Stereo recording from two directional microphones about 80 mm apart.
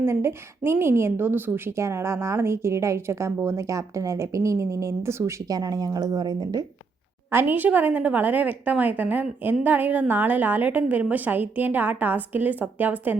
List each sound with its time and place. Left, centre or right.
0.0 s a woman's voice: right
5.5 s a woman's voice: right
7.3 s a woman's voice: right